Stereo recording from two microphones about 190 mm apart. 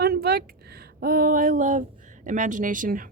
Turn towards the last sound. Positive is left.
turn(degrees=-45)  # may be behind; listen again after turning